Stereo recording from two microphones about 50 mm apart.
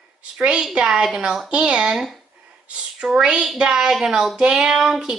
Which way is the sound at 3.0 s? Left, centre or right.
Centre.